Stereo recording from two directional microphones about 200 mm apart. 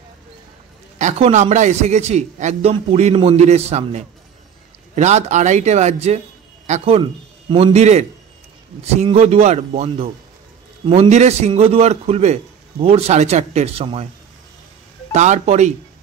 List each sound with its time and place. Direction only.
0.9 s a man's voice: 35° right (ahead or behind)
15.1 s a man's voice: 35° right (ahead or behind)